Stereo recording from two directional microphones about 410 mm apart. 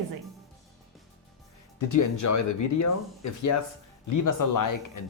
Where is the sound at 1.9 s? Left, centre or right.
Left.